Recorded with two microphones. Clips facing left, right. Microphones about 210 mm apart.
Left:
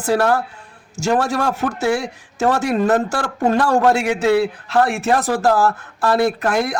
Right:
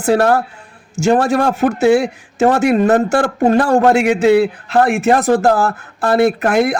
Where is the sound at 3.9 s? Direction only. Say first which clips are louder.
Right 5 dB; 20° right (ahead or behind).